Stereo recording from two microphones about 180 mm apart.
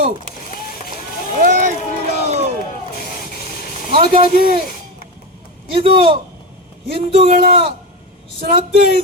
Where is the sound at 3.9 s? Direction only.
30° right (ahead or behind).